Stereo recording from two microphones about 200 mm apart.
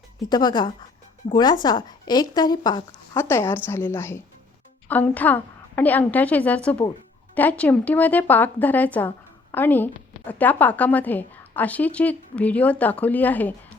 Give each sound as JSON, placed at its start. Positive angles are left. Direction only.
{"t": 0.3, "sound": "a woman's voice", "side_deg": 20}